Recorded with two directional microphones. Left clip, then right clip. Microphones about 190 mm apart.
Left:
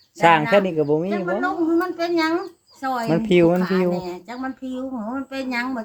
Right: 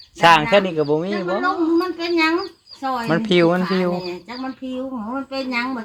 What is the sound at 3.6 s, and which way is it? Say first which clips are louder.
Speech: even; 10° left (ahead or behind).